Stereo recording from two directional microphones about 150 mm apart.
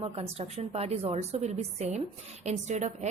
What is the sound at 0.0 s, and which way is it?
A woman's voice, 45° right (ahead or behind).